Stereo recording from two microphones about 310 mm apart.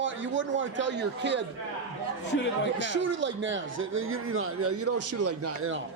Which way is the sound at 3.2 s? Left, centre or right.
Right.